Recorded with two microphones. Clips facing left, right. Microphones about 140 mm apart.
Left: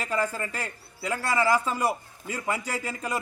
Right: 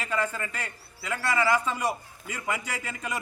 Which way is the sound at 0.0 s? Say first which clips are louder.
Left 2 dB; 35° left (ahead or behind).